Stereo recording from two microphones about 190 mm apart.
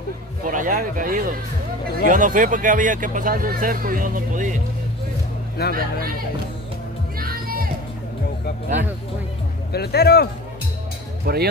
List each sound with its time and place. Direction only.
0.4 s speech: 45° right (ahead or behind)
5.7 s speech: 50° right (ahead or behind)
7.2 s music: 50° right (ahead or behind)
9.7 s speech: 55° left (ahead or behind)
11.3 s speech: 55° right (ahead or behind)